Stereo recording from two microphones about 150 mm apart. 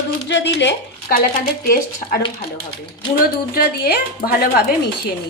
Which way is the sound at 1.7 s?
90° left.